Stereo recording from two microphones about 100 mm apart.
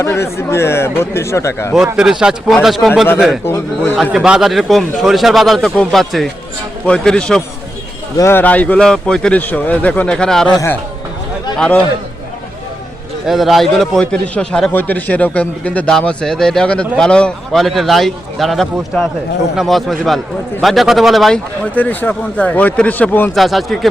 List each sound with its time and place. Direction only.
0.0 s speech: 25° left (ahead or behind)
1.7 s a man's voice: 5° right (ahead or behind)
8.2 s speech: 20° left (ahead or behind)
9.4 s speech: 20° left (ahead or behind)
11.5 s a man's voice: 10° left (ahead or behind)
13.2 s a man's voice: centre (ahead or behind)
14.7 s a man's voice: 20° left (ahead or behind)
23.3 s a man's voice: centre (ahead or behind)